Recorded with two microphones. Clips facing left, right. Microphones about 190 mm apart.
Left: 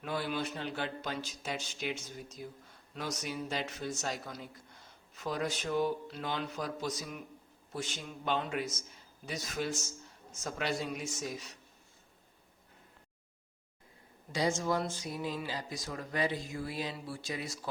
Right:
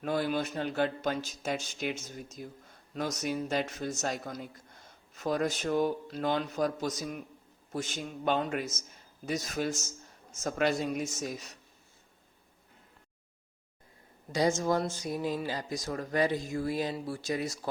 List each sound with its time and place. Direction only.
0.0 s speech: 45° right (ahead or behind)
14.3 s speech: 45° right (ahead or behind)